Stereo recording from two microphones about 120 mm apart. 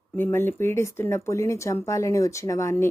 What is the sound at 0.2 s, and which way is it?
Speech, 20° left (ahead or behind).